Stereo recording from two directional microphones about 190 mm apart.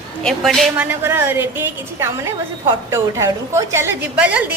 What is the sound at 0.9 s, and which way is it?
A woman's voice, 10° right (ahead or behind).